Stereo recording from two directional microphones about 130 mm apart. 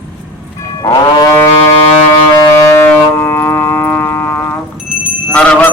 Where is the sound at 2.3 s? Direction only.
30° left (ahead or behind).